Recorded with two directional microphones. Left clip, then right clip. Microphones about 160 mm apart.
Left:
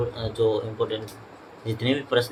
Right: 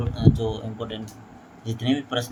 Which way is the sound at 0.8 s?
35° right (ahead or behind).